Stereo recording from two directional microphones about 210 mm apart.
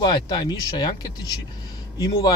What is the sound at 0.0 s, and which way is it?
Speech, 20° left (ahead or behind).